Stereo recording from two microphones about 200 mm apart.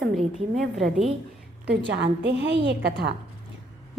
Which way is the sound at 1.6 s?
60° right (ahead or behind).